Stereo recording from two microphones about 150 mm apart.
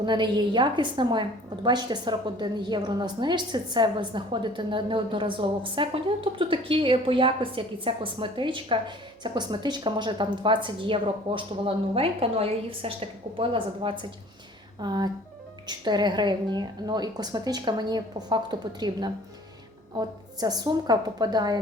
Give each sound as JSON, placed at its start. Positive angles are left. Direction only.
{"t": 0.0, "sound": "a woman's voice", "side_deg": -30}